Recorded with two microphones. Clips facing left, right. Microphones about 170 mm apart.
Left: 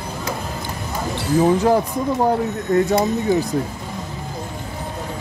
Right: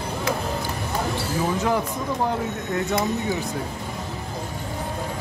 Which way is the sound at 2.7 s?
40° left (ahead or behind).